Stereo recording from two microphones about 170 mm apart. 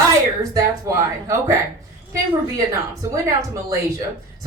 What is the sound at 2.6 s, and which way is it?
Speech, 20° right (ahead or behind).